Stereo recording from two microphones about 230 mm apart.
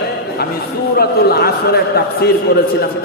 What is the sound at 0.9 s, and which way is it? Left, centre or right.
A man's voice, left.